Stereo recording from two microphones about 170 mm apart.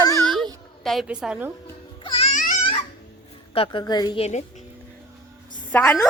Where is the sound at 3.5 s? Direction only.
30° left (ahead or behind).